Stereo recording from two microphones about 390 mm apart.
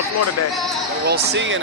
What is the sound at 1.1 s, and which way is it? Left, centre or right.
Speech, right.